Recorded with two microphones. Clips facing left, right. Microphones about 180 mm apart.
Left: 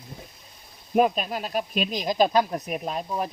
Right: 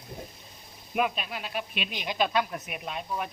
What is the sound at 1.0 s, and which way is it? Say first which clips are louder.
Speech: left 7 dB; 40° left (ahead or behind).